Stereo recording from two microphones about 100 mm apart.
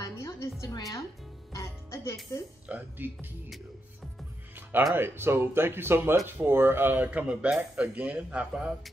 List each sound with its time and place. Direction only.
0.0 s music: 30° left (ahead or behind)
0.7 s speech: 35° left (ahead or behind)
1.5 s music: 30° left (ahead or behind)
2.7 s speech: 20° right (ahead or behind)
4.9 s speech: 20° right (ahead or behind)